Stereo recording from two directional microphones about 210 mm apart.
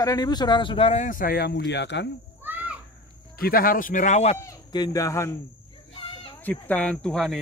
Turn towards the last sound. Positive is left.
turn(degrees=0)  # may be behind; listen again after turning